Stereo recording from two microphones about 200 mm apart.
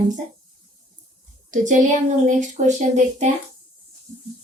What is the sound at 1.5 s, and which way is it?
Speech, 40° right (ahead or behind).